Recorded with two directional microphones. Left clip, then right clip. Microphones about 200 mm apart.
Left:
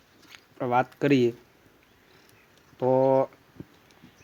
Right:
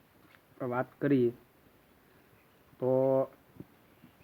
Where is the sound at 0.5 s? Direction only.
25° left (ahead or behind).